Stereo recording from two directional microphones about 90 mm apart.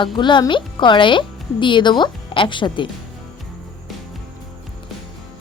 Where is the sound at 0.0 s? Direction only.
60° left (ahead or behind).